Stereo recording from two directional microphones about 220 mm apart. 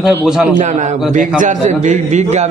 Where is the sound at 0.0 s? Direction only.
Centre (ahead or behind).